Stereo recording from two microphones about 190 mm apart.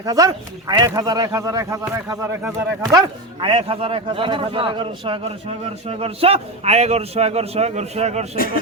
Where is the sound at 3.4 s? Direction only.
30° right (ahead or behind).